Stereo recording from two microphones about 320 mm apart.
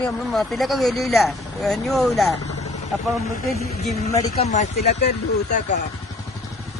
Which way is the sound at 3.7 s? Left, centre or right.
Left.